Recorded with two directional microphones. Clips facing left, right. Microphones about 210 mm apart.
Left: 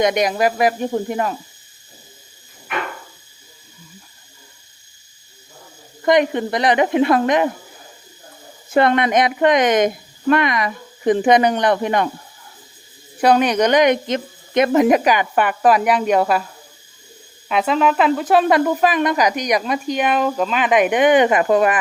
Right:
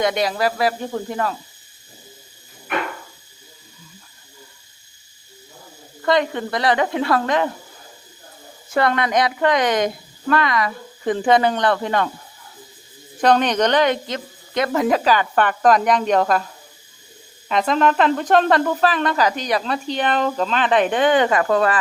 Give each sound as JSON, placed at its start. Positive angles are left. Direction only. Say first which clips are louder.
{"t": 0.0, "sound": "speech", "louder": "left 3 dB", "side_deg": 20}
{"t": 6.0, "sound": "speech", "louder": "left 4 dB", "side_deg": 20}
{"t": 8.7, "sound": "speech", "louder": "left 4 dB", "side_deg": 20}
{"t": 13.2, "sound": "speech", "louder": "left 2 dB", "side_deg": 10}
{"t": 17.5, "sound": "speech", "louder": "left 1 dB", "side_deg": 5}